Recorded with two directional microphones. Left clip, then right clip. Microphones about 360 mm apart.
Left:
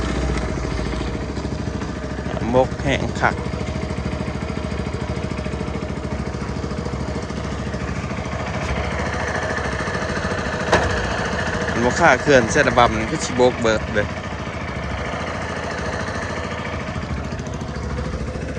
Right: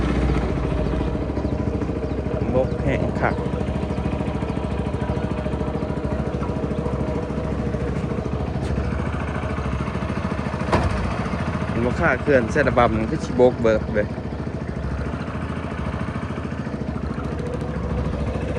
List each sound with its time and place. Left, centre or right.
2.6 s speech: centre
10.2 s vehicle: left
11.9 s speech: centre